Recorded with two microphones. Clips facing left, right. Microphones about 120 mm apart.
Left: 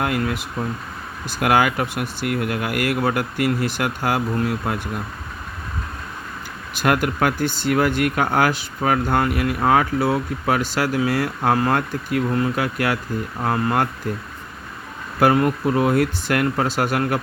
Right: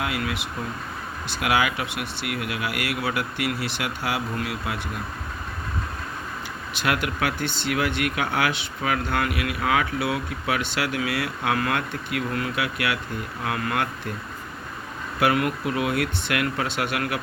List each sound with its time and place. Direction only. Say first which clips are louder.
0.0 s speech: left 5 dB; 45° left (ahead or behind)
6.7 s speech: left 6 dB; 45° left (ahead or behind)
15.2 s speech: left 5 dB; 40° left (ahead or behind)